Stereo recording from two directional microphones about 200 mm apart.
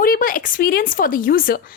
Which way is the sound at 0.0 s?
45° left (ahead or behind).